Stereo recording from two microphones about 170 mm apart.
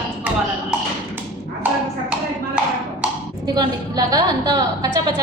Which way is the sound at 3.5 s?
20° right (ahead or behind).